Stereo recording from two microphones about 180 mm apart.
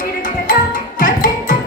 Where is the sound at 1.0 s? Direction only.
50° left (ahead or behind).